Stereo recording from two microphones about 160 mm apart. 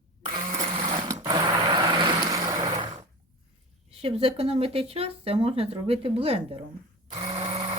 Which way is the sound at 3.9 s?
35° right (ahead or behind).